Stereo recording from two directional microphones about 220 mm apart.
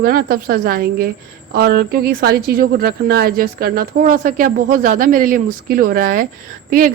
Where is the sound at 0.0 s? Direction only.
40° right (ahead or behind).